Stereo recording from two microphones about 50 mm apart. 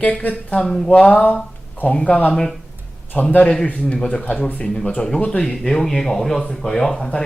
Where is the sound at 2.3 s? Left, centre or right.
Centre.